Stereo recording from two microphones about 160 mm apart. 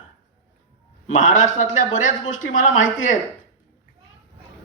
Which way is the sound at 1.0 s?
55° left (ahead or behind).